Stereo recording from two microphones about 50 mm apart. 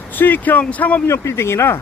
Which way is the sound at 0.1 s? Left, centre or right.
Left.